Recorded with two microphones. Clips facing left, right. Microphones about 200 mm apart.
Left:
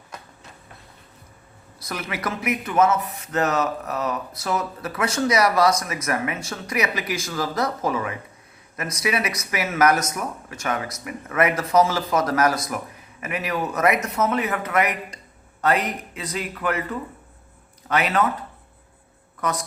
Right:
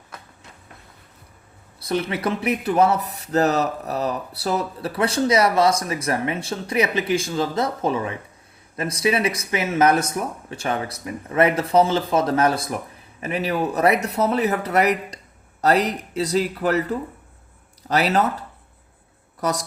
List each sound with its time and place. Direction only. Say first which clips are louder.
1.9 s speech: right 6 dB; 30° right (ahead or behind)